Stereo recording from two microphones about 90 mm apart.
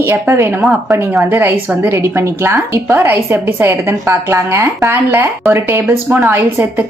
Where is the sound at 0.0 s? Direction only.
25° right (ahead or behind).